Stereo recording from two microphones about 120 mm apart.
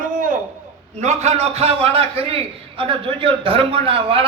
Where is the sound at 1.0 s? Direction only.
70° right (ahead or behind).